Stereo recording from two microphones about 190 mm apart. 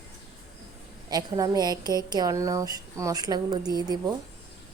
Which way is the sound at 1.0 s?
20° right (ahead or behind).